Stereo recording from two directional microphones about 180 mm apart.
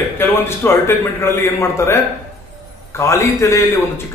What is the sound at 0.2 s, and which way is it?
Speech, 10° left (ahead or behind).